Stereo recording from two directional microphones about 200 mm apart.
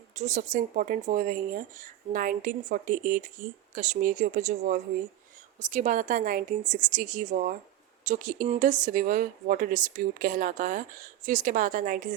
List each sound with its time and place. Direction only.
0.2 s speech: 40° right (ahead or behind)